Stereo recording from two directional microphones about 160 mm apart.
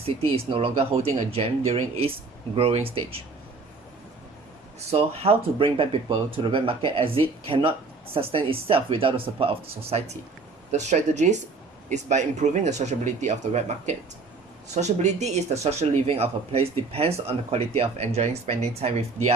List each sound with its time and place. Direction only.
0.0 s speech: 35° right (ahead or behind)
4.9 s speech: 40° right (ahead or behind)